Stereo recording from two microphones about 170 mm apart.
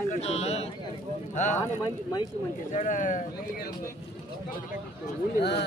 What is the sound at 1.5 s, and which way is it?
Speech, 20° left (ahead or behind).